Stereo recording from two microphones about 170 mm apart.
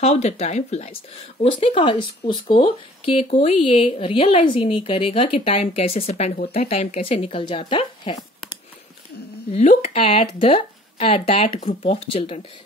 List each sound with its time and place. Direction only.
0.0 s speech: 35° left (ahead or behind)
9.5 s speech: 40° left (ahead or behind)